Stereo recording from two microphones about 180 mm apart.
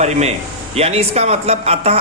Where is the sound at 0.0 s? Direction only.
35° right (ahead or behind).